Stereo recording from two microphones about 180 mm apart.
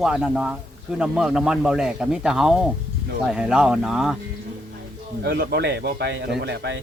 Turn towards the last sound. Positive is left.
turn(degrees=-70)  # may be behind; listen again after turning